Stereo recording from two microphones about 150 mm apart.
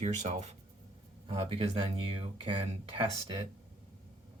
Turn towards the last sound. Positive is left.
turn(degrees=-35)  # may be behind; listen again after turning